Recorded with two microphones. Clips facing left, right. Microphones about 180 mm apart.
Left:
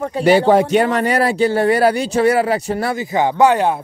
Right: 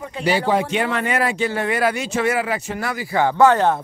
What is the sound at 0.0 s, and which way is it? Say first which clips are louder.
Speech: left 8 dB; 50° left (ahead or behind).